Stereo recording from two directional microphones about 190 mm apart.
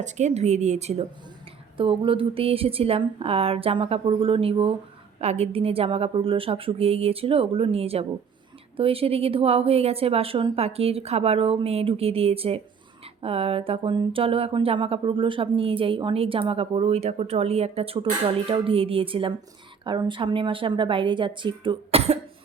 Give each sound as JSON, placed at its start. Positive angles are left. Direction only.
{"t": 0.0, "sound": "a woman's voice", "side_deg": -40}